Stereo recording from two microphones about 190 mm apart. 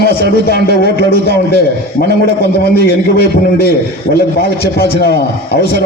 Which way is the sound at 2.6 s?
55° left (ahead or behind).